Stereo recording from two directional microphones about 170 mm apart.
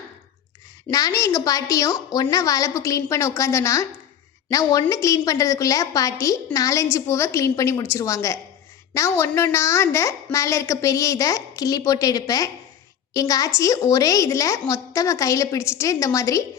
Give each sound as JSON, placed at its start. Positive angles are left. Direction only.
{"t": 0.9, "sound": "a woman's voice", "side_deg": 20}